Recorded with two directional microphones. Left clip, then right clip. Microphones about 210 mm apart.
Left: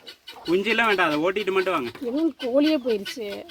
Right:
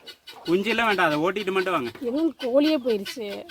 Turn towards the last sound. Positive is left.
turn(degrees=0)  # may be behind; listen again after turning